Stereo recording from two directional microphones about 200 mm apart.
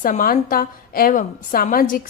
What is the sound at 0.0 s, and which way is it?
A woman's voice, 45° left (ahead or behind).